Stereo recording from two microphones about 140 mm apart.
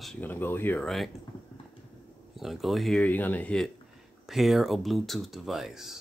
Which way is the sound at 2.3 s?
Centre (ahead or behind).